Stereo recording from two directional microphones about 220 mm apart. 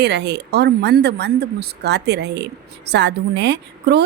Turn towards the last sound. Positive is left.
turn(degrees=-50)  # may be behind; listen again after turning